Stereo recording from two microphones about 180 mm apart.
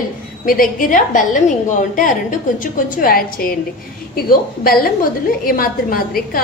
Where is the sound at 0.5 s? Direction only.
50° left (ahead or behind).